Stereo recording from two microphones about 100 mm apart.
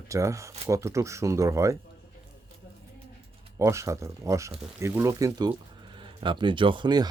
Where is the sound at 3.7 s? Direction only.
30° right (ahead or behind).